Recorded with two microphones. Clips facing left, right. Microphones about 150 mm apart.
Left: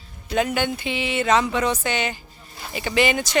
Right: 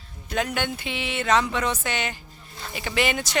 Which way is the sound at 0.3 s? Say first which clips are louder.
Left 4 dB; centre (ahead or behind).